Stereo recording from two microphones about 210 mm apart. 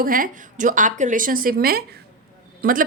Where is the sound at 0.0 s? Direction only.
40° right (ahead or behind).